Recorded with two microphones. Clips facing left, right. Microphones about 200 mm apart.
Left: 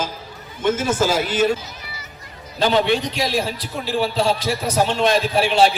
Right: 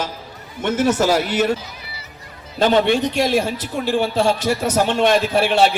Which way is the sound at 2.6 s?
50° right (ahead or behind).